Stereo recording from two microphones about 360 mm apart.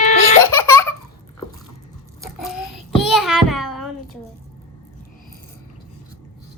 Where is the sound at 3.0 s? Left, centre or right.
Centre.